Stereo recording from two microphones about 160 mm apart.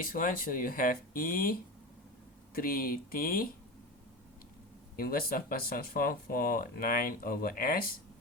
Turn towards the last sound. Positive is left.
turn(degrees=65)  # may be behind; listen again after turning